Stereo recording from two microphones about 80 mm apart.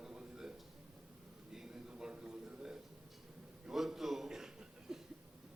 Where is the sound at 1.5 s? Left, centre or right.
Centre.